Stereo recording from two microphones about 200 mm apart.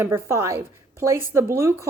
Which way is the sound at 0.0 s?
15° right (ahead or behind).